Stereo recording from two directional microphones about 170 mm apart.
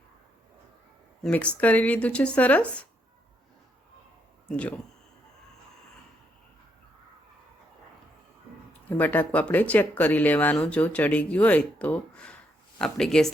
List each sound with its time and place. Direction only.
1.2 s speech: 5° left (ahead or behind)
4.4 s speech: 5° left (ahead or behind)
8.9 s speech: 10° left (ahead or behind)